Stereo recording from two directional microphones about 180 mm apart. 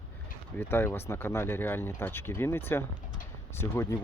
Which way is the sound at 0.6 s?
15° left (ahead or behind).